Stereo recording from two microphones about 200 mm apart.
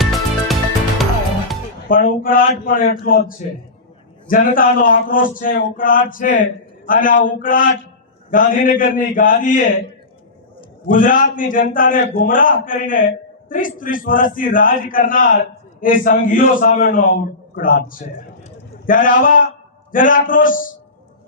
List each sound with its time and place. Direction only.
0.0 s music: centre (ahead or behind)
1.9 s a man's voice: 45° left (ahead or behind)
10.8 s a man's voice: 40° left (ahead or behind)